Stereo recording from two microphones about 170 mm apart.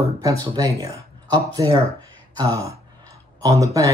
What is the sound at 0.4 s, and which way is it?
Speech, 20° right (ahead or behind).